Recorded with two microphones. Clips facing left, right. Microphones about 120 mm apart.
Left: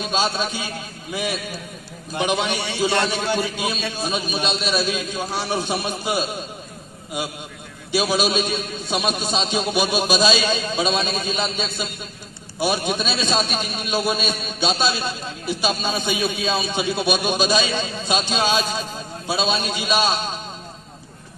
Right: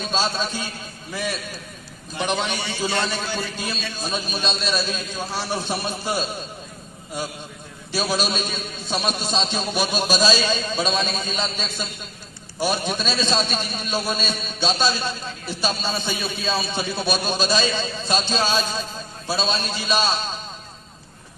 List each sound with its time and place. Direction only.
0.0 s a man's voice: 10° left (ahead or behind)
3.2 s a man's voice: 55° left (ahead or behind)
4.6 s a man's voice: 10° left (ahead or behind)
7.9 s a man's voice: 10° left (ahead or behind)